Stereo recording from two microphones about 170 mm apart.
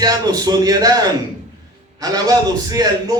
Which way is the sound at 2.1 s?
20° right (ahead or behind).